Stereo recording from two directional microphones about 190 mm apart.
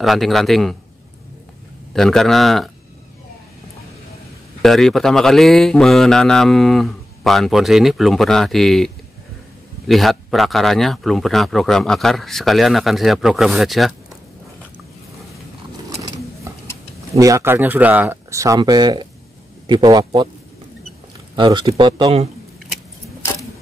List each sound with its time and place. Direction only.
0.0 s speech: centre (ahead or behind)
2.0 s speech: centre (ahead or behind)
4.6 s speech: centre (ahead or behind)
17.1 s speech: 15° right (ahead or behind)
21.4 s speech: 20° right (ahead or behind)